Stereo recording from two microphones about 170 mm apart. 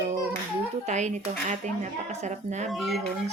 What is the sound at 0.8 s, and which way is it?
Speech, 45° right (ahead or behind).